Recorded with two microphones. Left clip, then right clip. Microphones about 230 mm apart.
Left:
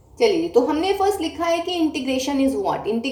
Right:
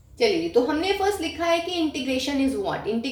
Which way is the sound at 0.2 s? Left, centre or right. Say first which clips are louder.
Left 3 dB; right.